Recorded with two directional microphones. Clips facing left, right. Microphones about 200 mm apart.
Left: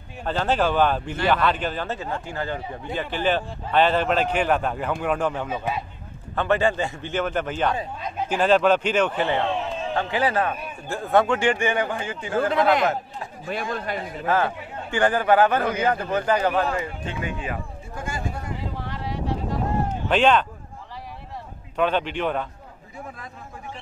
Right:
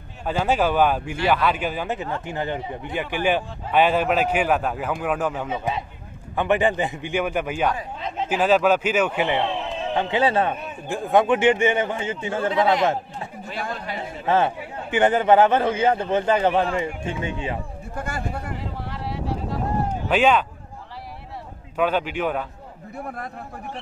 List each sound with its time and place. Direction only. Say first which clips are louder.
0.2 s a man's voice: right 1 dB; 10° right (ahead or behind); by 13.3 s 25° right (ahead or behind)
13.5 s speech: left 4 dB; 50° left (ahead or behind)
14.0 s a man's voice: right 4 dB; 25° right (ahead or behind)
17.9 s a man's voice: right 2 dB; 60° right (ahead or behind)
18.9 s a sound: even; 5° right (ahead or behind)
20.1 s a man's voice: even; 10° right (ahead or behind)
21.7 s a man's voice: right 1 dB; 5° right (ahead or behind)
23.0 s a man's voice: right 6 dB; 60° right (ahead or behind)